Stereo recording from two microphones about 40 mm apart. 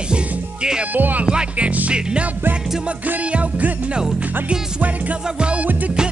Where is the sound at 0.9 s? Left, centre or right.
Right.